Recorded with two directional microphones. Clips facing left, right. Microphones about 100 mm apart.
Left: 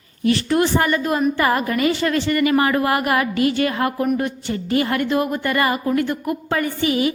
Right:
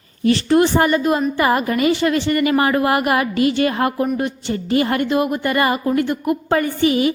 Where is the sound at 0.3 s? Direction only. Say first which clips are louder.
Right 3 dB; 30° right (ahead or behind).